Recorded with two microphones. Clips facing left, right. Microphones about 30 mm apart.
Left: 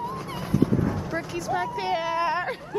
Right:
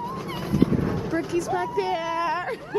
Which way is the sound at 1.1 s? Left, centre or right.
Centre.